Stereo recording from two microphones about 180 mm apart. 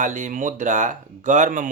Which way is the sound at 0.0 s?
45° right (ahead or behind).